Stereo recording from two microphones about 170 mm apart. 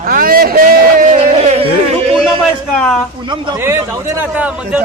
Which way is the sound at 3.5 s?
15° right (ahead or behind).